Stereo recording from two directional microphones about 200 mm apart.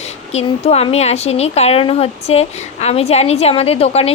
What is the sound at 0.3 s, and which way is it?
Speech, 30° left (ahead or behind).